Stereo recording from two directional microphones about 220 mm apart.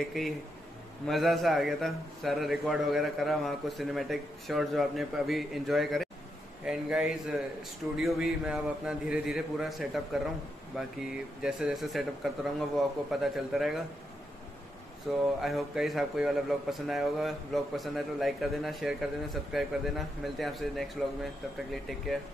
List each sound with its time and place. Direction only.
0.0 s a man's voice: centre (ahead or behind)
15.1 s a man's voice: centre (ahead or behind)